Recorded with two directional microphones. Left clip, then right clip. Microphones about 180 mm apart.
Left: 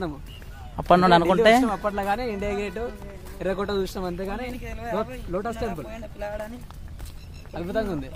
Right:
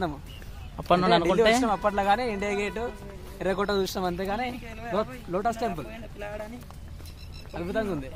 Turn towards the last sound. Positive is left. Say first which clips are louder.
# left 2 dB
turn(degrees=70)  # may be behind; listen again after turning